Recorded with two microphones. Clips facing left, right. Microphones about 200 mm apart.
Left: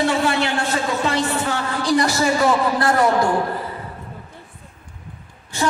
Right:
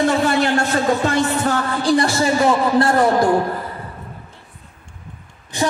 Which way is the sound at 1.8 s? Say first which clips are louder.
Even; 30° right (ahead or behind).